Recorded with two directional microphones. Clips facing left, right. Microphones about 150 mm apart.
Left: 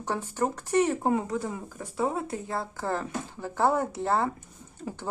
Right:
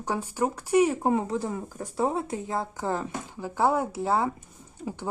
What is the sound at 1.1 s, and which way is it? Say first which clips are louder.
Speech: right 1 dB; 25° right (ahead or behind).